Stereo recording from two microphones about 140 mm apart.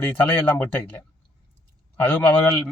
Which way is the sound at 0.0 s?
10° left (ahead or behind).